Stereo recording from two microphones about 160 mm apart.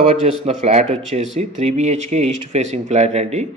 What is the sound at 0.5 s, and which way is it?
Speech, 45° right (ahead or behind).